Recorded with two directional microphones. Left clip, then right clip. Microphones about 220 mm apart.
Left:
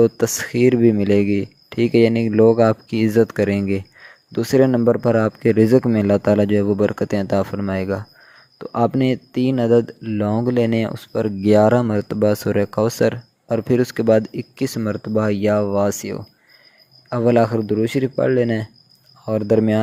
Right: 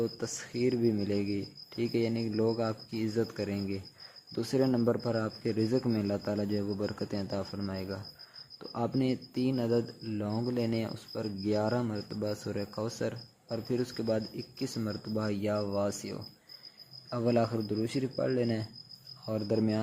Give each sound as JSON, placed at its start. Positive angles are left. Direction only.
{"t": 0.0, "sound": "speech", "side_deg": 40}